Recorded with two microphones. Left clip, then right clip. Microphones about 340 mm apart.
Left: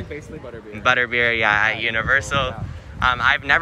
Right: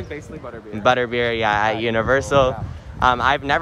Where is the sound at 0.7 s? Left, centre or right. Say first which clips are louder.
Even; centre.